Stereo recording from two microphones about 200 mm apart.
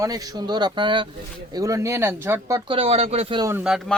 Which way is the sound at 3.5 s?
5° right (ahead or behind).